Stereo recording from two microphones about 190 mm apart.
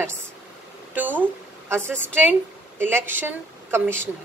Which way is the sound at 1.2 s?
10° right (ahead or behind).